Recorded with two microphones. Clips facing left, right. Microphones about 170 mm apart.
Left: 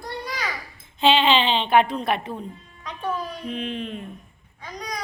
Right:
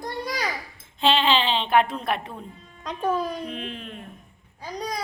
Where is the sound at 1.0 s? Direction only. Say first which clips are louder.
Left 3 dB; centre (ahead or behind).